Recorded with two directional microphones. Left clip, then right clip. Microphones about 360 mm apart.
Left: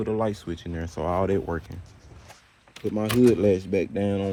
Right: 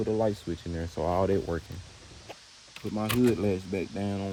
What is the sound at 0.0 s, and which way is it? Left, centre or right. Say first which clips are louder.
Speech: left 1 dB; left.